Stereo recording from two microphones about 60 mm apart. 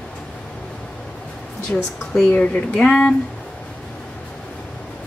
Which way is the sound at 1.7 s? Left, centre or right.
Left.